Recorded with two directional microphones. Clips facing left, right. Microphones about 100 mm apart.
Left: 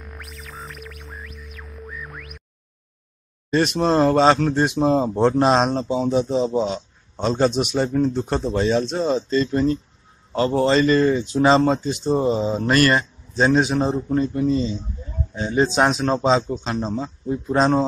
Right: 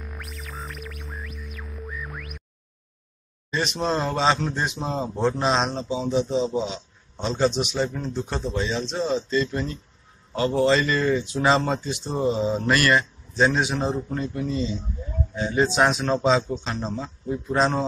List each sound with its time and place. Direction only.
0.0 s music: centre (ahead or behind)
3.4 s a man's voice: 50° left (ahead or behind); by 17.8 s 35° left (ahead or behind)